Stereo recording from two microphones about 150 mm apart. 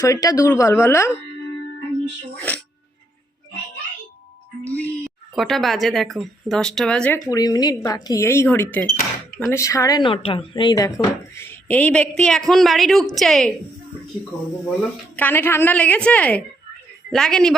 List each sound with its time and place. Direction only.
0.0 s speech: 20° left (ahead or behind)
4.6 s music: 10° left (ahead or behind)
5.3 s speech: centre (ahead or behind)
7.3 s speech: 25° left (ahead or behind)
10.1 s speech: 35° left (ahead or behind); by 13.5 s centre (ahead or behind)
15.1 s speech: 10° left (ahead or behind)